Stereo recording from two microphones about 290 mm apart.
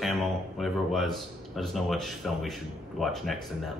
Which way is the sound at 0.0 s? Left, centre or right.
Centre.